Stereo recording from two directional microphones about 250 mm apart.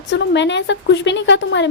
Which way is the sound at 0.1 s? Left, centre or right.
Left.